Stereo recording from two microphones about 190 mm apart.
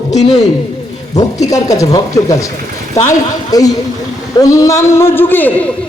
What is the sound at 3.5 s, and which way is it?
A man's voice, 20° left (ahead or behind).